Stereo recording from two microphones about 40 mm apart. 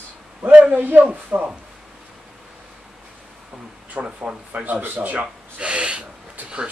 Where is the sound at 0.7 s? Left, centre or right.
Right.